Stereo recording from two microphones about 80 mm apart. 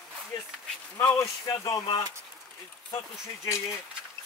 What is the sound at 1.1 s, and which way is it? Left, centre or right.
Speech, left.